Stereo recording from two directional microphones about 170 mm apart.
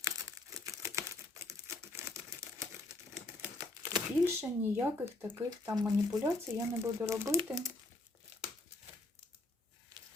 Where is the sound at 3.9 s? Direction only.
15° right (ahead or behind).